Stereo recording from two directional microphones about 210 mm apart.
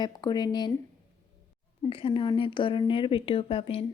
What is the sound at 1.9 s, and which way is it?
Speech, 25° left (ahead or behind).